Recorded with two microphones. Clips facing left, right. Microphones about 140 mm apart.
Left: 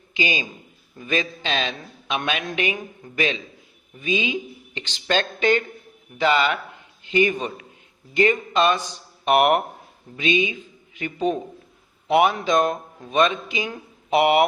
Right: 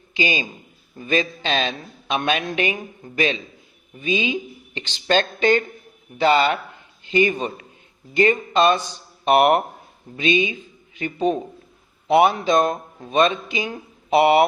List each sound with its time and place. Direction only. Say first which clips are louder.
0.1 s a man's voice: right 2 dB; 35° right (ahead or behind)
4.0 s a man's voice: right 2 dB; 35° right (ahead or behind)